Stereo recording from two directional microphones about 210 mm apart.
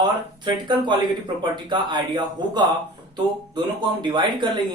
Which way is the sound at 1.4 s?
20° right (ahead or behind).